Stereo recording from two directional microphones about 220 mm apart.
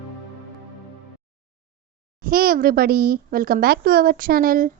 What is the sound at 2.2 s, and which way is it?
A woman's voice, 40° right (ahead or behind).